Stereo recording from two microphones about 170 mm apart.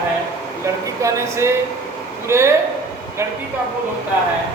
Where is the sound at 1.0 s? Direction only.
15° right (ahead or behind).